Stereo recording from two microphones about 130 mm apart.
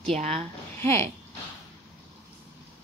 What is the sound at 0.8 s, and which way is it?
Speech, 20° left (ahead or behind).